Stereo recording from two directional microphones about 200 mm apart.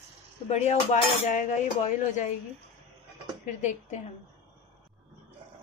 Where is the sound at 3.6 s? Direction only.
35° left (ahead or behind).